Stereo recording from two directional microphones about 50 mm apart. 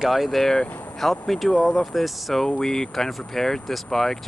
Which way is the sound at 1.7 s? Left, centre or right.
Centre.